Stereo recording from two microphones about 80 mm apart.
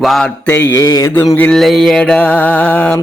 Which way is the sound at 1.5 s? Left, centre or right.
Centre.